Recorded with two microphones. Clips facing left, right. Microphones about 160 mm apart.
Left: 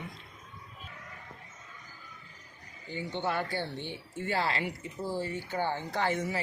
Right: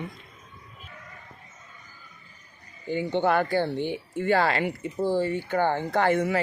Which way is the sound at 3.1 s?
90° right.